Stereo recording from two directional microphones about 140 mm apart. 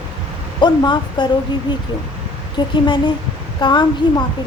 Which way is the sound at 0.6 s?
35° left (ahead or behind).